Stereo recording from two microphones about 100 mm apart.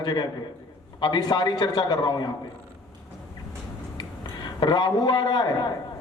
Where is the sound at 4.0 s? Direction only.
50° left (ahead or behind).